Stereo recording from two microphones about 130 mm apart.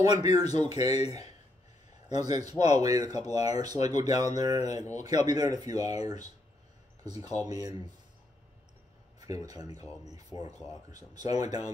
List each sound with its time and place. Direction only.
0.0 s speech: 35° right (ahead or behind)
0.3 s speech: 55° left (ahead or behind)
2.0 s speech: 30° right (ahead or behind)
4.1 s speech: 65° left (ahead or behind)
4.4 s speech: 30° right (ahead or behind)
7.4 s speech: 30° right (ahead or behind)
9.2 s speech: 25° right (ahead or behind)
10.9 s speech: 30° right (ahead or behind)